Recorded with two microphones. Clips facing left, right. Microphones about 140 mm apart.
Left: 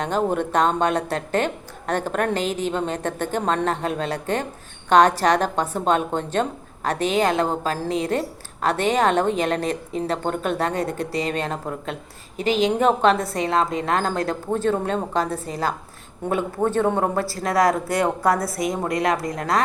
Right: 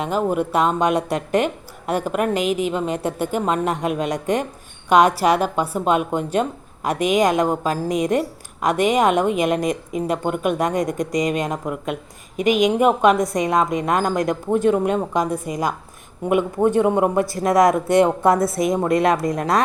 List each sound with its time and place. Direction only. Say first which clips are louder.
0.0 s a woman's voice: right 1 dB; 5° right (ahead or behind); by 19.6 s 20° right (ahead or behind)